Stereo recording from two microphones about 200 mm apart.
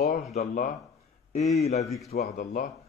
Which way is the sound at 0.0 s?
40° left (ahead or behind).